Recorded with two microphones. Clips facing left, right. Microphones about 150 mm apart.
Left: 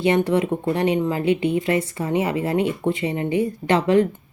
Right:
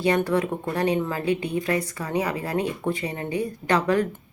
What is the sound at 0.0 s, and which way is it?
A woman's voice, 20° left (ahead or behind).